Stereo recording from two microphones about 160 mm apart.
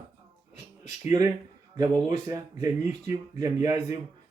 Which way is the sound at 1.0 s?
20° right (ahead or behind).